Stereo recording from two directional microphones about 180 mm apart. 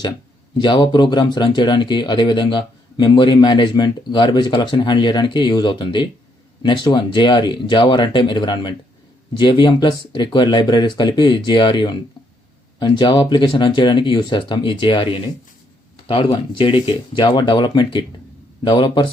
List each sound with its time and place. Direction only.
0.6 s speech: 25° left (ahead or behind)